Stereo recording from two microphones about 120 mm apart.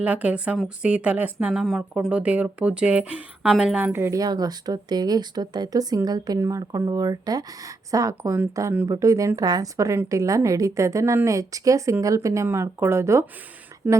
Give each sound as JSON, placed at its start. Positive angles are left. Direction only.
{"t": 0.0, "sound": "speech", "side_deg": -10}
{"t": 3.9, "sound": "a woman's voice", "side_deg": -20}
{"t": 4.2, "sound": "a woman's voice", "side_deg": -30}